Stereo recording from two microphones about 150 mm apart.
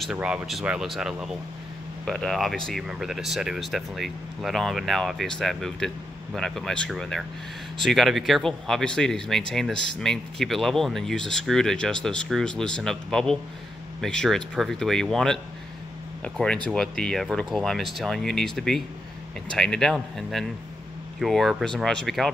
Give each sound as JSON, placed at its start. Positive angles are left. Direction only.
{"t": 0.0, "sound": "speech", "side_deg": -5}
{"t": 16.6, "sound": "speech", "side_deg": 5}
{"t": 19.5, "sound": "speech", "side_deg": 5}